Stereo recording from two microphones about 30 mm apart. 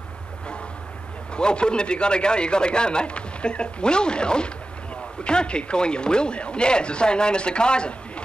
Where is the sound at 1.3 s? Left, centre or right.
Left.